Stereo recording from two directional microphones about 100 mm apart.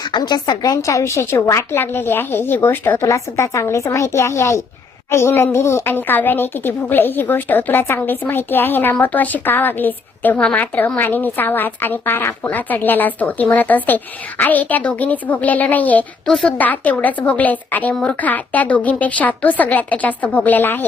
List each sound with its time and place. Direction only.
0.1 s a woman's voice: 45° left (ahead or behind); by 3.0 s 20° left (ahead or behind)
3.0 s a woman's voice: 30° left (ahead or behind)